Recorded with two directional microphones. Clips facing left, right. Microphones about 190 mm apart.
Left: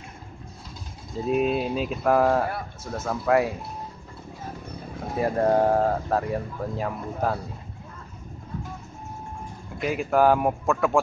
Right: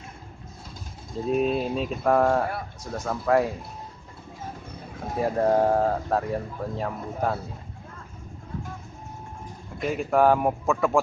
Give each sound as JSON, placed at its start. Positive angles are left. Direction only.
{"t": 1.2, "sound": "speech", "side_deg": 5}
{"t": 5.2, "sound": "speech", "side_deg": 0}
{"t": 9.8, "sound": "speech", "side_deg": 0}